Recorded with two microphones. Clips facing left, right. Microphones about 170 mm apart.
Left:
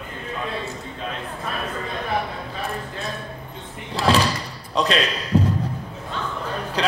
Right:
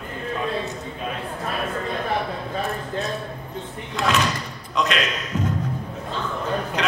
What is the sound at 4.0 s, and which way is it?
Thump, 30° left (ahead or behind).